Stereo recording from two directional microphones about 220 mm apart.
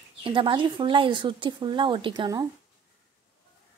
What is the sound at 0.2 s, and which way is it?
Speech, 25° right (ahead or behind).